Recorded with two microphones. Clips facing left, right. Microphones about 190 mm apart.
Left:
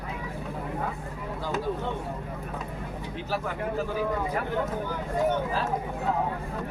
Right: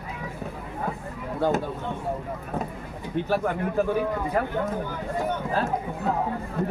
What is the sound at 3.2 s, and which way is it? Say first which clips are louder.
Speech: right 6 dB; 60° right (ahead or behind).